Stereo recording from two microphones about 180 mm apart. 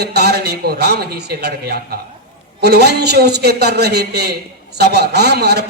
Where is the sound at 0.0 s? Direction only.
65° right (ahead or behind).